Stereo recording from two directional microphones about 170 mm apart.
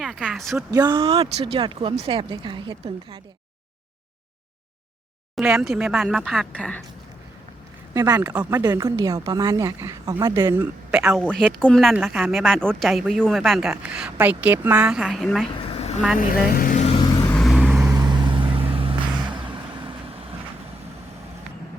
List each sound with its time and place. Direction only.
0.0 s speech: 5° right (ahead or behind)
0.7 s speech: 25° right (ahead or behind)
5.5 s speech: 5° right (ahead or behind)
7.9 s speech: 20° right (ahead or behind)
11.2 s speech: 5° left (ahead or behind)
15.5 s vehicle: 35° left (ahead or behind)
16.1 s speech: 55° left (ahead or behind)
16.8 s vehicle: 35° left (ahead or behind)
17.2 s vehicle: 5° left (ahead or behind)
17.9 s vehicle: 25° right (ahead or behind)